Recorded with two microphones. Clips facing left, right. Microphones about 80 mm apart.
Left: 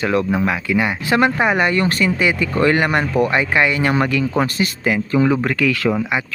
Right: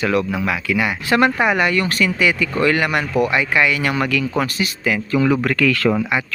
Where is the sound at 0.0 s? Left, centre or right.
Left.